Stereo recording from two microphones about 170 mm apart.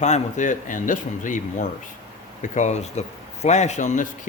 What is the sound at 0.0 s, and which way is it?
Speech, 45° left (ahead or behind).